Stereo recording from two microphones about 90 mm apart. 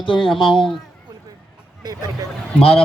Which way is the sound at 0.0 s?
70° left (ahead or behind).